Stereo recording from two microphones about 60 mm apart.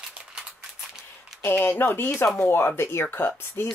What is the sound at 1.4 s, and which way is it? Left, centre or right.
Speech, left.